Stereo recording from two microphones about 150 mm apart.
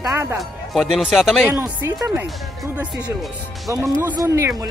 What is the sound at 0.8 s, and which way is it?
Speech, centre (ahead or behind).